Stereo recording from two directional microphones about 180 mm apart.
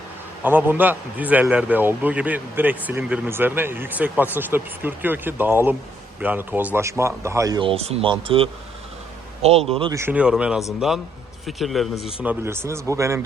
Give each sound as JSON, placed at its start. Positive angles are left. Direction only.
{"t": 0.4, "sound": "a man's voice", "side_deg": -10}
{"t": 9.9, "sound": "speech", "side_deg": -10}
{"t": 12.2, "sound": "a man's voice", "side_deg": -10}